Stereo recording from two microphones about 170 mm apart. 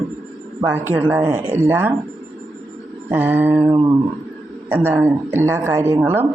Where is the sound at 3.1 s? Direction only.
10° right (ahead or behind).